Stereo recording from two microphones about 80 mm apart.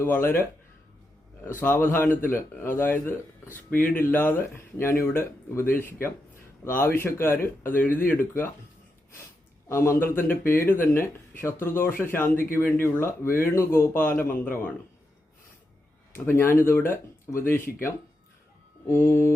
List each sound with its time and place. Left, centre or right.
0.0 s speech: left
1.5 s speech: left
9.6 s speech: left
16.1 s speech: left
18.9 s speech: left